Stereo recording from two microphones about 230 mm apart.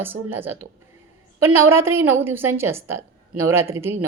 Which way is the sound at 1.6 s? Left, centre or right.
Centre.